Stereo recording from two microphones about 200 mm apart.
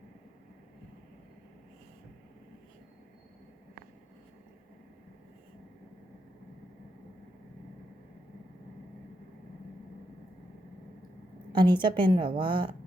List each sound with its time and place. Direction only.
11.5 s a woman's voice: 25° right (ahead or behind)